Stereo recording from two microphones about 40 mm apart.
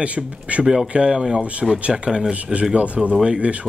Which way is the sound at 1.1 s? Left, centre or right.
Centre.